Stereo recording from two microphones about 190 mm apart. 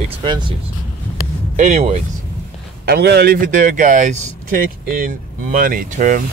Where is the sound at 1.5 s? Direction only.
40° right (ahead or behind).